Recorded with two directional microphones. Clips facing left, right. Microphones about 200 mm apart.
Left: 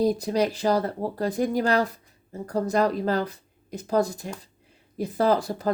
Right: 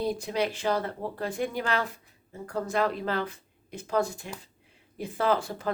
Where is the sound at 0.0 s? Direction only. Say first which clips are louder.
Left 6 dB; 40° left (ahead or behind).